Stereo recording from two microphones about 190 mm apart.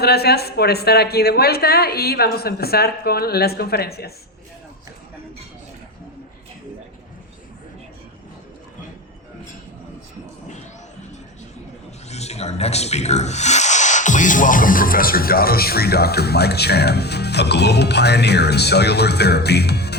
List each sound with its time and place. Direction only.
0.0 s speech: 55° left (ahead or behind)
12.0 s speech: 35° left (ahead or behind); by 20.0 s 60° left (ahead or behind)